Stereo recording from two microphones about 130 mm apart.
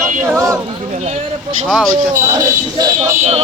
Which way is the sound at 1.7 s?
Centre (ahead or behind).